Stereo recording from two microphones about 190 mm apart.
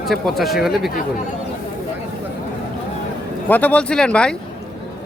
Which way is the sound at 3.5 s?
10° left (ahead or behind).